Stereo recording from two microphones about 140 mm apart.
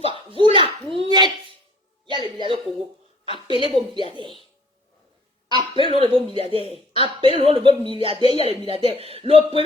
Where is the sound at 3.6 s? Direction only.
35° right (ahead or behind).